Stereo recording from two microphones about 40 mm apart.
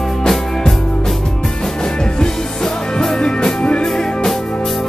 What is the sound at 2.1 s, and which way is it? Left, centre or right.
Music, centre.